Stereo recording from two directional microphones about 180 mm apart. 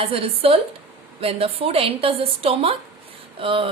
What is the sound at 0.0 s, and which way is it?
A woman's voice, 30° right (ahead or behind).